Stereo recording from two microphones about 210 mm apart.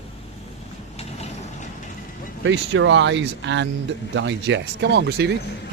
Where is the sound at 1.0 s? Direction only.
30° left (ahead or behind).